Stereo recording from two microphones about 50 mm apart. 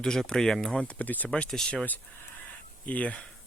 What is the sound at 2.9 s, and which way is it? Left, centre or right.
Speech, left.